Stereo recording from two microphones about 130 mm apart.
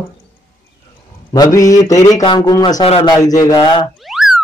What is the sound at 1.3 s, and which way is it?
A man's voice, 25° left (ahead or behind).